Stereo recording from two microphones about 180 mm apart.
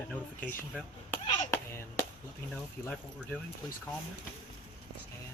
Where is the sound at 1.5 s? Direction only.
15° left (ahead or behind).